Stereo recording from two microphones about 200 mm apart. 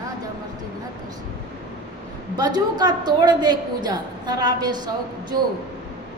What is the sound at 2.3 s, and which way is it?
A woman's voice, 20° right (ahead or behind).